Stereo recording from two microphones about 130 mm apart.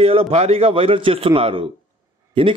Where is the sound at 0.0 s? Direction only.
50° right (ahead or behind).